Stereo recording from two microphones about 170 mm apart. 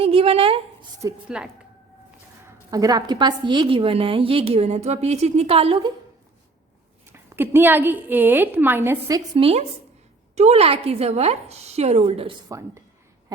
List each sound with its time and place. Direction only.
0.0 s a woman's voice: 35° right (ahead or behind)
1.3 s speech: 5° right (ahead or behind)
2.6 s a woman's voice: 20° right (ahead or behind)
7.1 s a woman's voice: 15° right (ahead or behind)
9.4 s a woman's voice: 35° right (ahead or behind)
12.5 s a woman's voice: 20° right (ahead or behind)